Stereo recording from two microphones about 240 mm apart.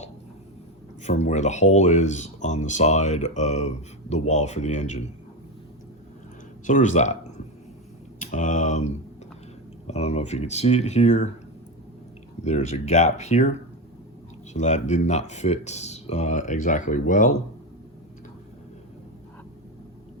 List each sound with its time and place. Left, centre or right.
1.0 s speech: left
6.7 s speech: left
12.5 s speech: left
14.5 s speech: left